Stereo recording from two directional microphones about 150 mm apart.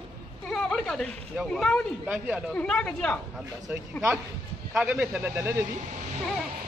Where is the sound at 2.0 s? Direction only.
10° right (ahead or behind).